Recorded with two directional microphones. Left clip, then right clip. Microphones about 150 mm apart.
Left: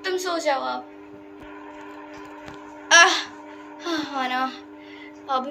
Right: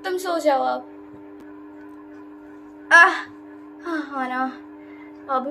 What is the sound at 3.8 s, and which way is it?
Speech, 50° right (ahead or behind).